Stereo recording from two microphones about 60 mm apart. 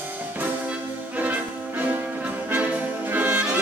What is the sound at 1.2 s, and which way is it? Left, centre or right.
Music, right.